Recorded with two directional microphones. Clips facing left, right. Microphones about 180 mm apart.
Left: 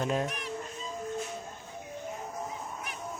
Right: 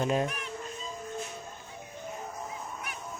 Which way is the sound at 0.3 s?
35° left (ahead or behind).